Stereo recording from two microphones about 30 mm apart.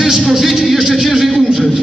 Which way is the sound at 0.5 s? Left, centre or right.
Centre.